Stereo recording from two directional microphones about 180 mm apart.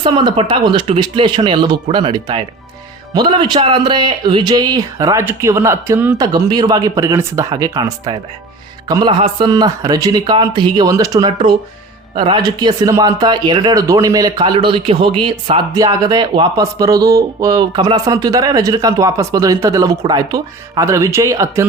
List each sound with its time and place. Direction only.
0.0 s speech: 25° right (ahead or behind)